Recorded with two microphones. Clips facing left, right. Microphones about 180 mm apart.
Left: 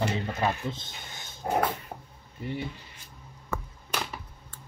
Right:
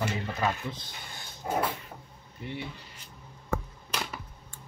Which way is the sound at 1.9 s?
50° left (ahead or behind).